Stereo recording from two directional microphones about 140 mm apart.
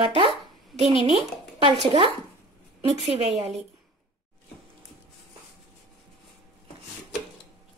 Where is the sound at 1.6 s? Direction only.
40° right (ahead or behind).